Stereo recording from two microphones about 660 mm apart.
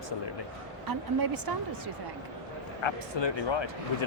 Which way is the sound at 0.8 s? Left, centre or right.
Right.